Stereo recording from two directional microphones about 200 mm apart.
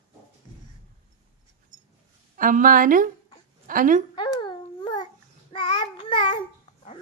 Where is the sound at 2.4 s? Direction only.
40° right (ahead or behind).